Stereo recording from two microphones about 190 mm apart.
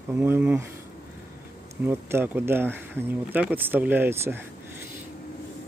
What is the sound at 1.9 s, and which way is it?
Speech, 10° right (ahead or behind).